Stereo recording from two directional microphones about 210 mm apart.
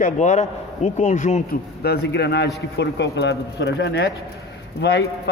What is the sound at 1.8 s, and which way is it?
A man's voice, 50° left (ahead or behind).